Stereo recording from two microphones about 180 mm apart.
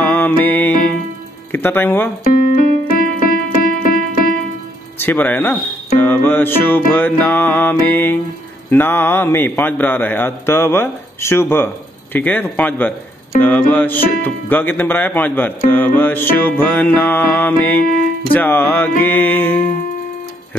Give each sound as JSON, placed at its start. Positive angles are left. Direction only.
{"t": 0.0, "sound": "music", "side_deg": 10}
{"t": 1.5, "sound": "a man's voice", "side_deg": 10}
{"t": 2.2, "sound": "keyboard", "side_deg": 50}
{"t": 4.9, "sound": "a man's voice", "side_deg": 10}